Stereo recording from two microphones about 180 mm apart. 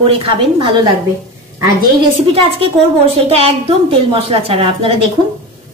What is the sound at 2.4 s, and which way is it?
A woman's voice, 30° right (ahead or behind).